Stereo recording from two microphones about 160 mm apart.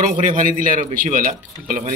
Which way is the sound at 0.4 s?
55° right (ahead or behind).